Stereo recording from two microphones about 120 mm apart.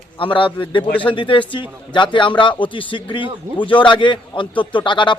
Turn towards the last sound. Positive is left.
turn(degrees=40)  # may be behind; listen again after turning